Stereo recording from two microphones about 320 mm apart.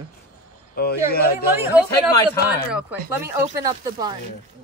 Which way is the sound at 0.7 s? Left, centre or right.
Left.